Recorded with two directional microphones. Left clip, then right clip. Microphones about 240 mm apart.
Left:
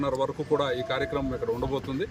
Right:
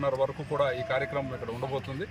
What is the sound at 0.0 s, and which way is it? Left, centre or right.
A man's voice, centre.